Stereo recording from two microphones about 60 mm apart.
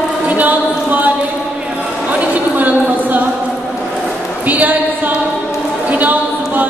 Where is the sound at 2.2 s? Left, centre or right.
Right.